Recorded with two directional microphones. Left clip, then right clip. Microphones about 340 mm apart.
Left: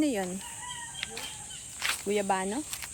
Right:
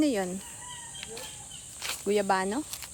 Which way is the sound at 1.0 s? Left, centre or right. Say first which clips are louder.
Left 5 dB; centre.